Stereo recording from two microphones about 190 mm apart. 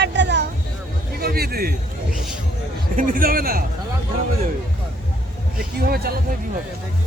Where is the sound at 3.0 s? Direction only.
50° right (ahead or behind).